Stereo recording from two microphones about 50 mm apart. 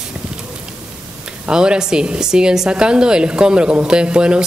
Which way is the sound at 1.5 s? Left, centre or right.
Centre.